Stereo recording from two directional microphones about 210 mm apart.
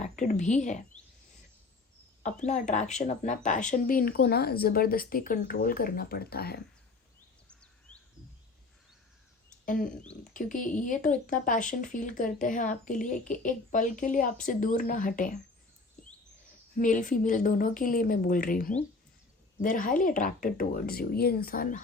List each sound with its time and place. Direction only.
0.0 s speech: 35° left (ahead or behind)
2.2 s speech: 35° left (ahead or behind)
7.4 s a sound: 5° left (ahead or behind)
9.6 s speech: 40° left (ahead or behind)
9.9 s speech: 5° left (ahead or behind)
10.3 s speech: 40° left (ahead or behind)
16.7 s speech: 40° left (ahead or behind)